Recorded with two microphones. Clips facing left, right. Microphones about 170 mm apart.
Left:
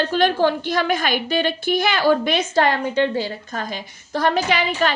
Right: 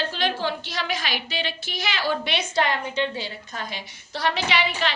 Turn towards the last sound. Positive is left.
turn(degrees=45)  # may be behind; listen again after turning